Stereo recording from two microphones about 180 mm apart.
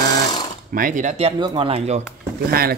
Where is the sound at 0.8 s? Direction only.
45° right (ahead or behind); by 2.0 s 30° right (ahead or behind).